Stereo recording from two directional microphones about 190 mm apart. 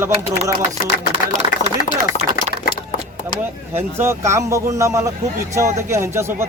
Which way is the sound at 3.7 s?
15° right (ahead or behind).